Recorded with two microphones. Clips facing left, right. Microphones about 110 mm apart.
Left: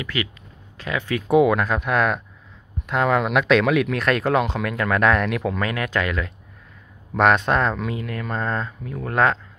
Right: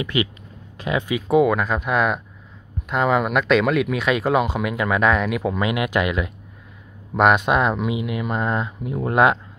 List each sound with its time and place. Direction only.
0.0 s speech: 20° right (ahead or behind)
1.1 s speech: centre (ahead or behind); by 9.4 s 15° right (ahead or behind)